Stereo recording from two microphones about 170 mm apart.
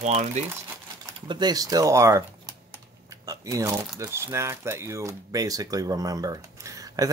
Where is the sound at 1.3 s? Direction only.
25° right (ahead or behind).